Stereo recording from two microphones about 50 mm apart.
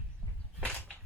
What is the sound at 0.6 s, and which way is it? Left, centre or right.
Whip, left.